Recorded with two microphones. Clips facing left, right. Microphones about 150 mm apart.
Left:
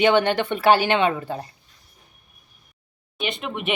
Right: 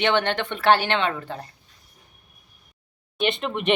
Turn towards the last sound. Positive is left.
turn(degrees=5)  # may be behind; listen again after turning